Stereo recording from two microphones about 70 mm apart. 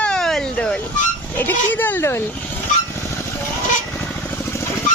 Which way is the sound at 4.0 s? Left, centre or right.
Left.